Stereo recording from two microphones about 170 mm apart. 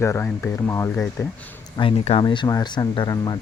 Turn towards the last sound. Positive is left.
turn(degrees=25)  # may be behind; listen again after turning